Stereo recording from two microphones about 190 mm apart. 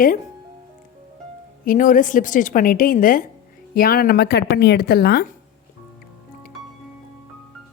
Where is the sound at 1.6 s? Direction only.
45° left (ahead or behind).